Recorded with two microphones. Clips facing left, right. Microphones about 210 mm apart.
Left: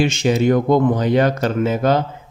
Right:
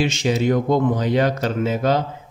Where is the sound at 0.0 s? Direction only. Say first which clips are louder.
Left 3 dB; 50° left (ahead or behind).